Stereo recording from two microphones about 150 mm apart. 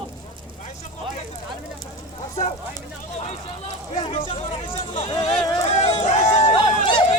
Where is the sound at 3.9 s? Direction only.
40° left (ahead or behind).